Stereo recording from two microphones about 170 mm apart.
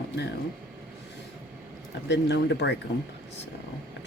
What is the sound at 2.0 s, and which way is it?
Speech, 85° left.